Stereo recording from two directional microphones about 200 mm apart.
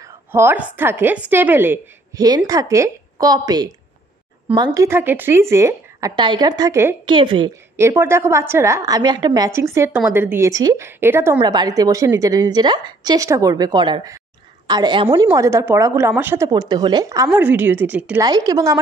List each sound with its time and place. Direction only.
0.0 s a woman's voice: 10° right (ahead or behind)
7.1 s a woman's voice: 25° right (ahead or behind)
7.7 s a woman's voice: 10° right (ahead or behind)
18.2 s a woman's voice: 20° right (ahead or behind)